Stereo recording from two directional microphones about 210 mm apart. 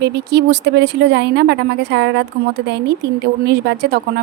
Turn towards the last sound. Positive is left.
turn(degrees=-50)  # may be behind; listen again after turning